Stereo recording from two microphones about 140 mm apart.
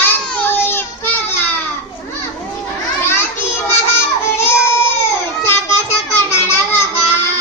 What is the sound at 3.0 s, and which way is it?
Children playing, 15° left (ahead or behind).